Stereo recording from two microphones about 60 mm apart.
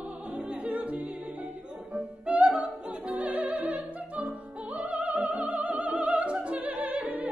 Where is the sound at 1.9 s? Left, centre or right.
Right.